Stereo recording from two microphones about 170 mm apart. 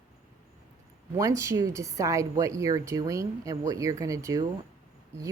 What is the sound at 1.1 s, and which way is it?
A woman's voice, 15° right (ahead or behind).